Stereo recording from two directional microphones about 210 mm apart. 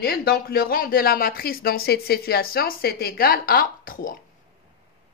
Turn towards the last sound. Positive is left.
turn(degrees=45)  # may be behind; listen again after turning